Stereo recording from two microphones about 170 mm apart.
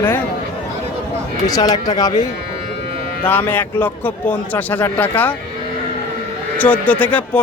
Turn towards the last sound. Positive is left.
turn(degrees=10)  # may be behind; listen again after turning